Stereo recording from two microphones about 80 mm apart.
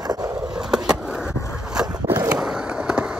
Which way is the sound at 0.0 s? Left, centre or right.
Right.